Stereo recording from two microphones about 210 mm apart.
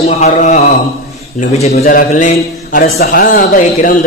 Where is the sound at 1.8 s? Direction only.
40° left (ahead or behind).